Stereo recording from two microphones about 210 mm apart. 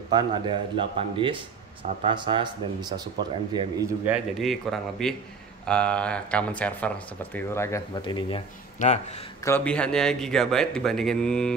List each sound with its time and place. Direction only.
0.1 s speech: 20° right (ahead or behind); by 8.4 s 20° left (ahead or behind)
8.7 s speech: 30° left (ahead or behind)
9.4 s speech: 10° left (ahead or behind)